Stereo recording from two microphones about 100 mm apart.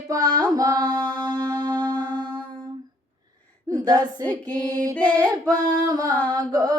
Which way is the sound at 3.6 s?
35° right (ahead or behind).